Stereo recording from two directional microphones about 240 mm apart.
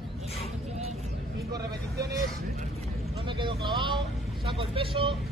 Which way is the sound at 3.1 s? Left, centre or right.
Right.